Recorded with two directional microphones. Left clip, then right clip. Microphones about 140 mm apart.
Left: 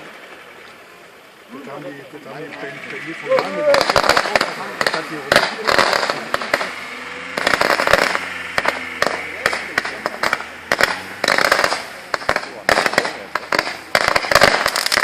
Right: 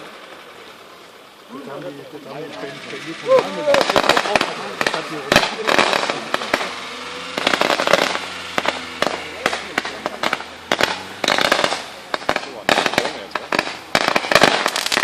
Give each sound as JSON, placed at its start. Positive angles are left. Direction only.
{"t": 3.3, "sound": "speech", "side_deg": -15}
{"t": 3.7, "sound": "speech", "side_deg": 25}
{"t": 7.1, "sound": "fireworks", "side_deg": -10}
{"t": 7.3, "sound": "fireworks", "side_deg": 25}